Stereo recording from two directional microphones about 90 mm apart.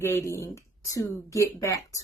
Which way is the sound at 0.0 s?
30° left (ahead or behind).